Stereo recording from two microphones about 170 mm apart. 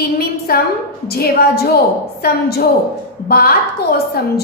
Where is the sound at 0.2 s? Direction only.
65° left (ahead or behind).